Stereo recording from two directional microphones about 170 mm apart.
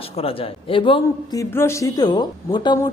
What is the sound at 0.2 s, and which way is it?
A man's voice, 35° left (ahead or behind).